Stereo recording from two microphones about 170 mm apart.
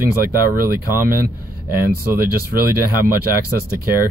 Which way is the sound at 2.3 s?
60° right (ahead or behind).